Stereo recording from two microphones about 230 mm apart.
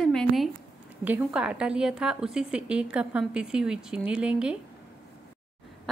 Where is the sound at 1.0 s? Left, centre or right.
Centre.